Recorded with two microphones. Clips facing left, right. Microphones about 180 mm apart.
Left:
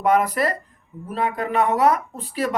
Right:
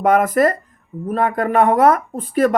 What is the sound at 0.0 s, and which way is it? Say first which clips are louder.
Speech: right 5 dB; 50° right (ahead or behind).